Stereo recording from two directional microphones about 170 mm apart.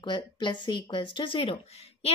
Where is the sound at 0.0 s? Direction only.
25° left (ahead or behind).